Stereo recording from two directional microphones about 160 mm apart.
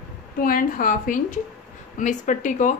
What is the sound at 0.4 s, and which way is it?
A woman's voice, 60° left (ahead or behind).